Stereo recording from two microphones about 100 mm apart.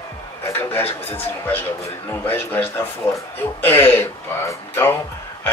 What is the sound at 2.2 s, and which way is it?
Speech, 20° left (ahead or behind).